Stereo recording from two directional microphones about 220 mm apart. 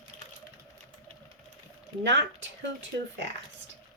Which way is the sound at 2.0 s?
55° right (ahead or behind).